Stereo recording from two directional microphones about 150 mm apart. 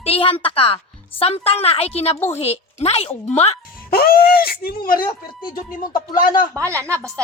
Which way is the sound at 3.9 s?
85° left.